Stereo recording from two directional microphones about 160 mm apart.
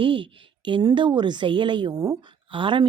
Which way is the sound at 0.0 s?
30° right (ahead or behind).